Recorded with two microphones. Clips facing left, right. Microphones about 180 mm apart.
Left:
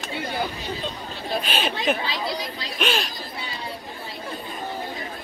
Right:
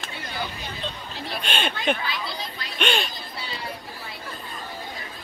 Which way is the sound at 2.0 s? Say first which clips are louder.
Left 2 dB; 30° left (ahead or behind).